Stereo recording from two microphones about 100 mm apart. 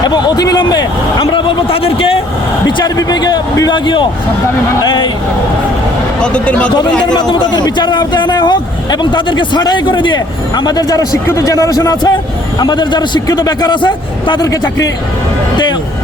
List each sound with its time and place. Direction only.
0.0 s a man's voice: 45° left (ahead or behind)
1.2 s a man's voice: 60° left (ahead or behind)
2.6 s a man's voice: 45° left (ahead or behind)
6.2 s speech: 10° left (ahead or behind)
7.1 s a man's voice: 45° left (ahead or behind)
14.4 s a man's voice: 35° left (ahead or behind)